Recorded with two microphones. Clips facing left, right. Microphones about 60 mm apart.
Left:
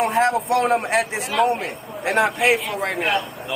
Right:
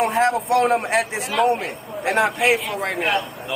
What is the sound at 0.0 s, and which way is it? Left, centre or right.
Speech, centre.